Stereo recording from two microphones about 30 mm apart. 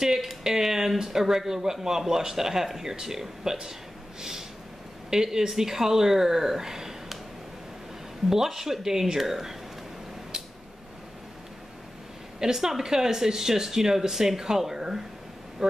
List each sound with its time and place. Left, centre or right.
0.0 s speech: centre
4.2 s snort: centre
5.1 s speech: centre
8.3 s speech: centre
12.4 s speech: centre